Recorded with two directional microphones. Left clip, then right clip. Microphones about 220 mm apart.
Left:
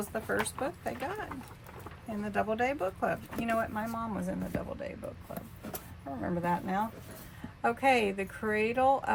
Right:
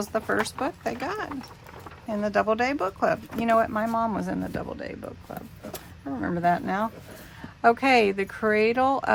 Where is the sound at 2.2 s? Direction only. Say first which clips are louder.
Right 7 dB; 30° right (ahead or behind).